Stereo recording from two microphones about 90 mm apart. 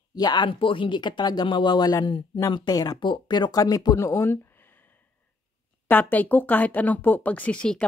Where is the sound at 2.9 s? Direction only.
60° left (ahead or behind); by 4.3 s 30° left (ahead or behind).